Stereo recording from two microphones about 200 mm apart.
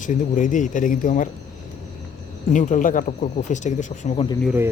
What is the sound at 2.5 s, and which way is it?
Speech, 40° left (ahead or behind).